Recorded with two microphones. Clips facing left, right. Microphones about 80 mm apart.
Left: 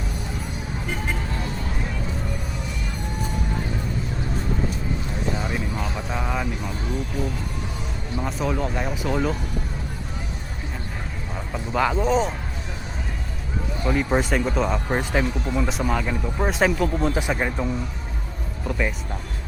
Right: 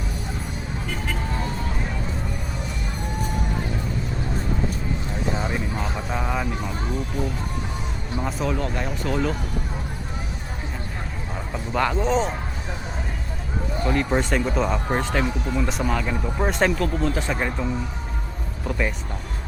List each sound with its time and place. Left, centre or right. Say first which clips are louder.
5.7 s a sound: right 1 dB; centre
6.1 s vehicle: right 1 dB; centre
8.2 s speech: even; centre
11.5 s speech: left 1 dB; centre
13.8 s speech: left 1 dB; centre
14.9 s speech: even; centre
17.0 s speech: left 1 dB; centre
18.7 s speech: even; centre